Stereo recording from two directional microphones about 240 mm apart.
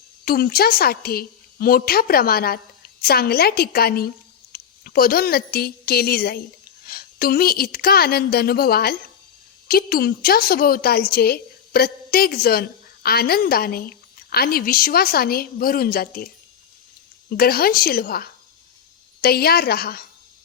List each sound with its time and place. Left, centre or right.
0.3 s a woman's voice: left